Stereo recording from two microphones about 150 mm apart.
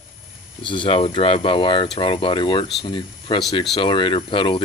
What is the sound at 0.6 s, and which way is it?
Speech, 35° left (ahead or behind).